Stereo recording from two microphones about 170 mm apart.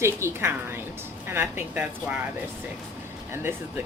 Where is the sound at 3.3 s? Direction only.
15° right (ahead or behind).